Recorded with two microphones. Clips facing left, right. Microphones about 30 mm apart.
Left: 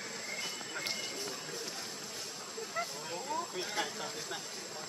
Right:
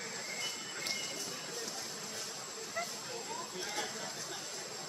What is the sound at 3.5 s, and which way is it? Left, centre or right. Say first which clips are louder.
Speech: left 3 dB; left.